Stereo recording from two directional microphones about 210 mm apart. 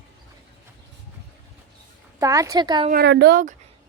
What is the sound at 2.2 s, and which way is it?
Speech, 15° right (ahead or behind).